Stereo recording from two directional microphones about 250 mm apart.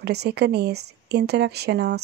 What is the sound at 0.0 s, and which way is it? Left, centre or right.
Speech, right.